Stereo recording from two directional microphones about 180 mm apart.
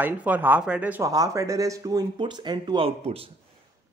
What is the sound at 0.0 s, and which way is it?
Speech, 10° right (ahead or behind).